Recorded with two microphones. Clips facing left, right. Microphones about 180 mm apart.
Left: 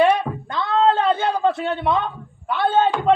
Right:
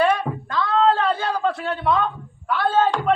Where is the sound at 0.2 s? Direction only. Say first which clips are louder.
Right 1 dB; 25° left (ahead or behind).